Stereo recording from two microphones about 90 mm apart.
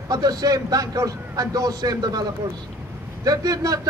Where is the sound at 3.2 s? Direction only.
45° right (ahead or behind).